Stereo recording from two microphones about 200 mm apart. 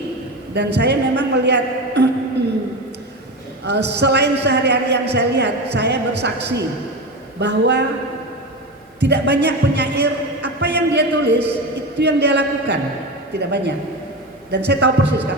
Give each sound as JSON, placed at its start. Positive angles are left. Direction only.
{"t": 0.5, "sound": "a man's voice", "side_deg": -60}
{"t": 3.6, "sound": "a man's voice", "side_deg": -60}
{"t": 9.0, "sound": "a man's voice", "side_deg": -60}